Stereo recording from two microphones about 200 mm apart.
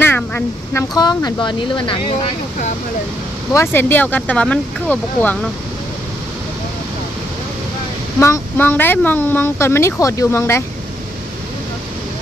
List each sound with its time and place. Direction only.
0.0 s speech: 10° left (ahead or behind)
3.5 s speech: 10° left (ahead or behind)
8.2 s speech: 10° left (ahead or behind)